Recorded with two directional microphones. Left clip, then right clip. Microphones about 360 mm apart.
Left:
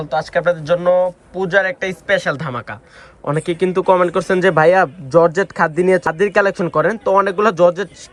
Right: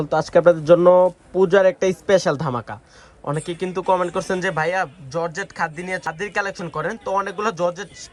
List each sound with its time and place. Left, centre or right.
0.0 s a man's voice: right; by 7.9 s centre